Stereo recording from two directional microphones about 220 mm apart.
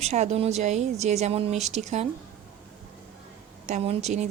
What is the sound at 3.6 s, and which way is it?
Speech, 30° right (ahead or behind).